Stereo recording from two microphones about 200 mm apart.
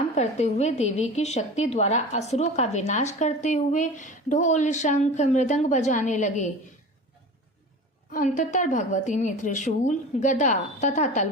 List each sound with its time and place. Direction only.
0.2 s a woman's voice: 35° left (ahead or behind)
8.1 s a woman's voice: 40° left (ahead or behind)